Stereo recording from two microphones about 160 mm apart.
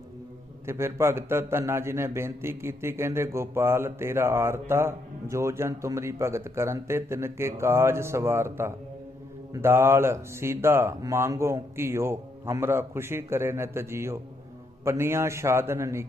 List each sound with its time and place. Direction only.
0.7 s a man's voice: 15° right (ahead or behind)